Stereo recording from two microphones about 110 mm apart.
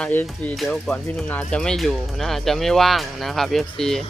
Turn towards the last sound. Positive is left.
turn(degrees=5)  # may be behind; listen again after turning